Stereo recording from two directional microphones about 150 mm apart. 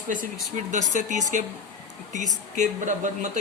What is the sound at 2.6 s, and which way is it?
Speech, 55° right (ahead or behind).